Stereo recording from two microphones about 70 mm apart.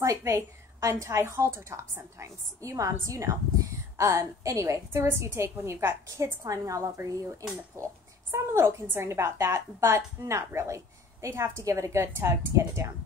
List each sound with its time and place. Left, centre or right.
0.0 s a woman's voice: right